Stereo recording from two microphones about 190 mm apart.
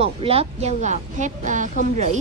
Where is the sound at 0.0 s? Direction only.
30° right (ahead or behind).